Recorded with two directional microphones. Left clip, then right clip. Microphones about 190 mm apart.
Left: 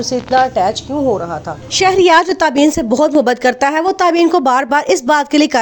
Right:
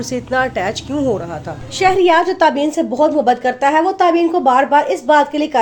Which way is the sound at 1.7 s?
50° left (ahead or behind).